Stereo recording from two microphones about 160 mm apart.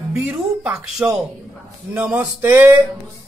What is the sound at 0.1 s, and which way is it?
Speech, 10° right (ahead or behind).